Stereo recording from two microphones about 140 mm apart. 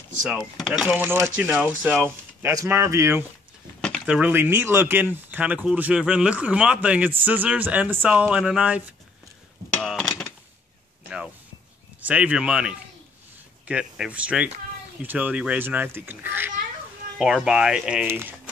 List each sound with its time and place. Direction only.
0.2 s speech: 5° right (ahead or behind)
1.0 s speech: 15° right (ahead or behind)
3.8 s a sound: 10° left (ahead or behind)
4.1 s speech: 10° right (ahead or behind)
9.8 s a sound: centre (ahead or behind)
12.0 s speech: 10° right (ahead or behind)